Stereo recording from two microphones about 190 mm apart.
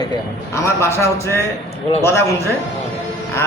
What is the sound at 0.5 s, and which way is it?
A man's voice, 15° left (ahead or behind).